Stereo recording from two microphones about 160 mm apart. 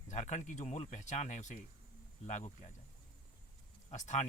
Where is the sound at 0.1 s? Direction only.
50° left (ahead or behind).